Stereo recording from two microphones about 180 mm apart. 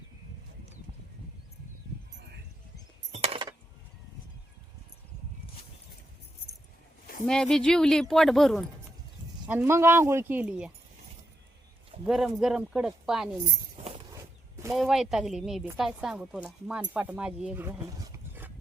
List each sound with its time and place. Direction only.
3.2 s keys jangling: 25° right (ahead or behind)
7.3 s speech: 5° left (ahead or behind)
9.5 s speech: 10° right (ahead or behind)
12.0 s speech: centre (ahead or behind)
14.7 s speech: centre (ahead or behind)